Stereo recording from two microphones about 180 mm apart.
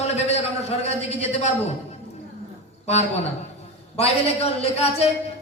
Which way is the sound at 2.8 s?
35° left (ahead or behind).